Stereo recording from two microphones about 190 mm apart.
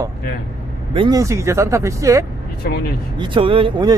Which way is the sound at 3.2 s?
25° right (ahead or behind).